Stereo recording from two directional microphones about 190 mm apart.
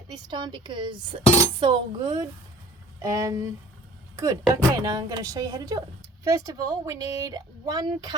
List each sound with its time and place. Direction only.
0.3 s speech: 25° right (ahead or behind)